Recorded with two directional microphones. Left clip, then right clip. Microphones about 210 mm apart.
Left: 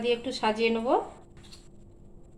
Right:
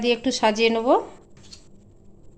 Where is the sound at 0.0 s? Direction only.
50° right (ahead or behind).